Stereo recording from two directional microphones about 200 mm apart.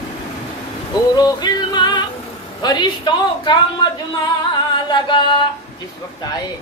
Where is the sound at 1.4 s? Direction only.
20° left (ahead or behind).